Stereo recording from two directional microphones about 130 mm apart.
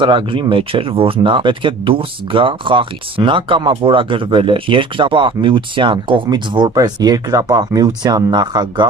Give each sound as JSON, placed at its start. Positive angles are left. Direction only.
{"t": 0.0, "sound": "speech", "side_deg": -40}